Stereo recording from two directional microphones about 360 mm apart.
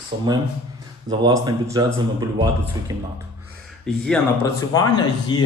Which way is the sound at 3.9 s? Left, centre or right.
Centre.